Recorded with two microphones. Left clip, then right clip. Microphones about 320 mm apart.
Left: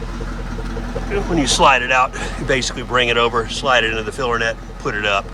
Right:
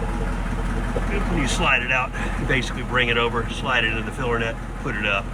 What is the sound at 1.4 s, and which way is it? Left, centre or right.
Speech, centre.